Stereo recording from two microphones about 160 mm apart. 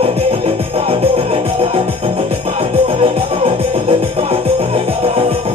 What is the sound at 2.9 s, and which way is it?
Music, 35° right (ahead or behind).